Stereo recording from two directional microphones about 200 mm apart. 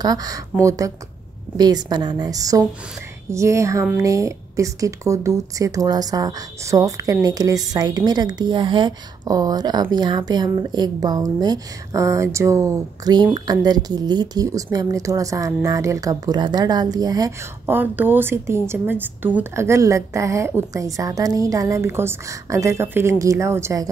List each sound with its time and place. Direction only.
0.0 s a woman's voice: 20° right (ahead or behind)